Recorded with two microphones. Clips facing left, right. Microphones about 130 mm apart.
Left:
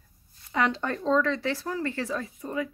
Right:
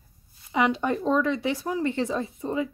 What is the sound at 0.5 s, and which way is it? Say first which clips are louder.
Speech: right 3 dB; 15° right (ahead or behind).